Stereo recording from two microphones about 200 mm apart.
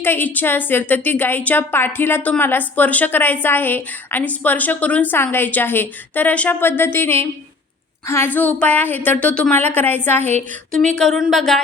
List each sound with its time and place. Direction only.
0.0 s a woman's voice: 10° left (ahead or behind)
10.2 s a woman's voice: 35° right (ahead or behind)
10.9 s speech: centre (ahead or behind)